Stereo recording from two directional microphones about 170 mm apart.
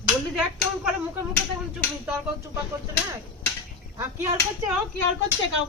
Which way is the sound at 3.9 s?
15° right (ahead or behind).